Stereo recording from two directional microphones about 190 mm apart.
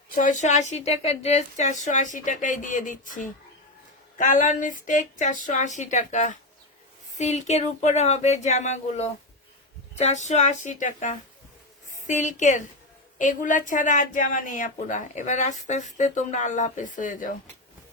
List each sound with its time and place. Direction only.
0.2 s speech: 40° left (ahead or behind)